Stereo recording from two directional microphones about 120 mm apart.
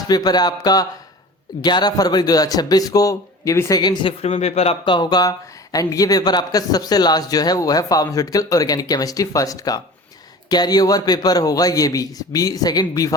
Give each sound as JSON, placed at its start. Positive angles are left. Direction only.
{"t": 0.1, "sound": "speech", "side_deg": 35}
{"t": 4.2, "sound": "speech", "side_deg": 65}
{"t": 4.9, "sound": "speech", "side_deg": 35}